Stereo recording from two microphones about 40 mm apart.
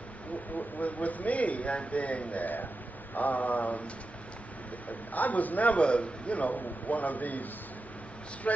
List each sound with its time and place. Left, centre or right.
0.6 s a man's voice: left
4.8 s a man's voice: left
8.5 s a man's voice: left